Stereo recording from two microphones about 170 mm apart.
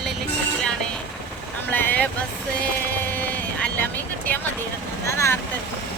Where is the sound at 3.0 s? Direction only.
10° left (ahead or behind).